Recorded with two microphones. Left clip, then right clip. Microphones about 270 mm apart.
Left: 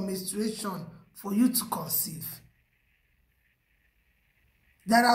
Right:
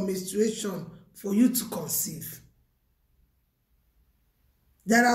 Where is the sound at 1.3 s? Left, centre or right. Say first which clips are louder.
Right 2 dB; centre.